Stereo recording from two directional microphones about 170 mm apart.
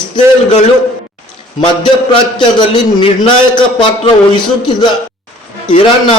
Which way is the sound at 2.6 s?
25° left (ahead or behind).